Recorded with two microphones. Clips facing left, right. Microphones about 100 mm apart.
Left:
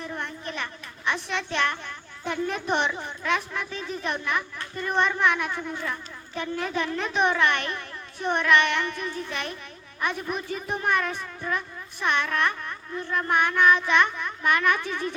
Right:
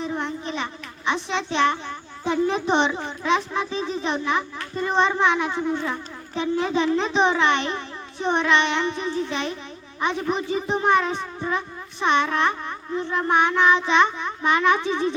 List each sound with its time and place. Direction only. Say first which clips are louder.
0.0 s a child's voice: right 6 dB; 20° right (ahead or behind)